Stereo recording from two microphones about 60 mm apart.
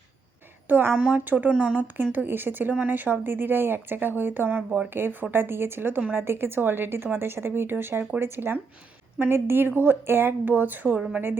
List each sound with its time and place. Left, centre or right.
0.7 s a woman's voice: right
0.9 s speech: centre
1.2 s a woman's voice: right
1.5 s speech: centre
2.1 s a woman's voice: right
4.9 s a woman's voice: right